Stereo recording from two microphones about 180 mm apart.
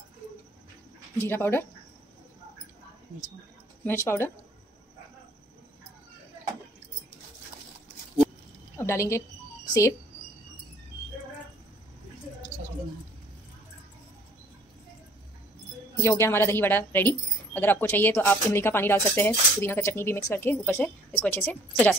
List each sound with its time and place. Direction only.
1.1 s speech: 10° left (ahead or behind)
3.8 s speech: 15° left (ahead or behind)
8.7 s speech: 15° left (ahead or behind)
16.0 s speech: 15° left (ahead or behind)